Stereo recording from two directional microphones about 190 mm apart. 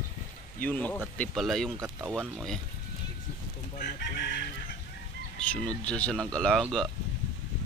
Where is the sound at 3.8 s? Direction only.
60° left (ahead or behind).